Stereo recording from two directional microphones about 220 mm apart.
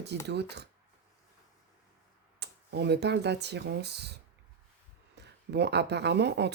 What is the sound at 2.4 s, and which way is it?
Speech, 50° right (ahead or behind).